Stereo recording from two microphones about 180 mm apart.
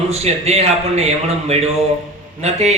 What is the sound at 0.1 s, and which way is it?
A man's voice, 35° right (ahead or behind).